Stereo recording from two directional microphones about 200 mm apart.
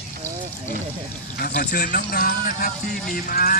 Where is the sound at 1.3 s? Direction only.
50° left (ahead or behind).